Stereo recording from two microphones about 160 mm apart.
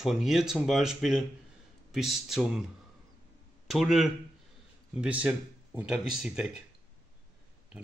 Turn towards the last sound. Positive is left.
turn(degrees=0)  # may be behind; listen again after turning